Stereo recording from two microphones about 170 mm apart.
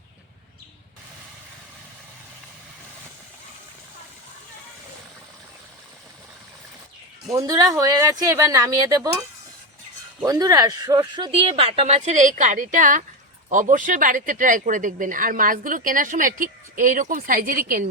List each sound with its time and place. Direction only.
7.3 s speech: 20° right (ahead or behind)
10.2 s speech: 25° right (ahead or behind); by 17.8 s 55° right (ahead or behind)